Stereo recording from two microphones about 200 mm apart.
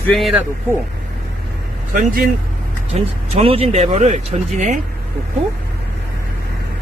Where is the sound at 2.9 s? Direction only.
35° right (ahead or behind).